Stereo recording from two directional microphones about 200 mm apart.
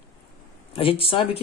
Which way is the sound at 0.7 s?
25° left (ahead or behind).